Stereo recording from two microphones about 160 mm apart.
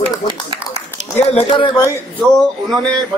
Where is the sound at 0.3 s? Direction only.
30° right (ahead or behind).